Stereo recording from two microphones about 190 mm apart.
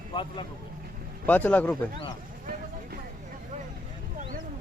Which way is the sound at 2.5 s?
50° right (ahead or behind).